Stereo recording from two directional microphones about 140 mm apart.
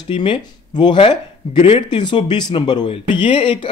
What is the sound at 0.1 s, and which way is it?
Speech, 35° left (ahead or behind).